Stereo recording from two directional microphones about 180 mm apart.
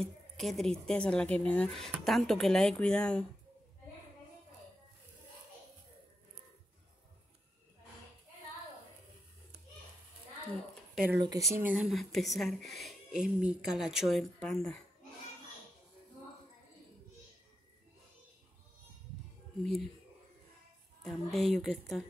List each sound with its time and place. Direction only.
0.0 s speech: centre (ahead or behind)
11.1 s speech: 20° right (ahead or behind)
11.5 s speech: 10° right (ahead or behind)
19.6 s speech: centre (ahead or behind)
21.0 s speech: centre (ahead or behind)